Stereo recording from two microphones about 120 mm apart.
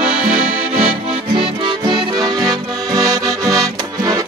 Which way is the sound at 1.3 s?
45° right (ahead or behind).